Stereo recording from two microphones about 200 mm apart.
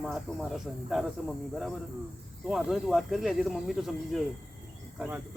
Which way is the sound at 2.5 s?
Centre (ahead or behind).